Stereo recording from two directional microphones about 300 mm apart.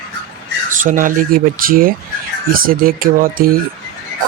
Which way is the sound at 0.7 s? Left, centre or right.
Right.